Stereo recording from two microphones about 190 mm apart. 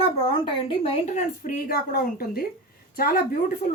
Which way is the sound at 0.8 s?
40° left (ahead or behind).